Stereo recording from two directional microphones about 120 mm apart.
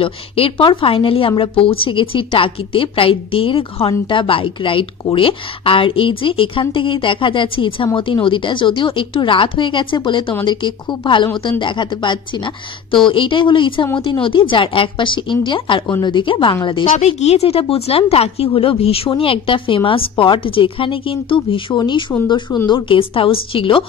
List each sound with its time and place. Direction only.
0.0 s a woman's voice: 45° left (ahead or behind)
17.0 s a woman's voice: 65° left (ahead or behind); by 23.9 s 45° left (ahead or behind)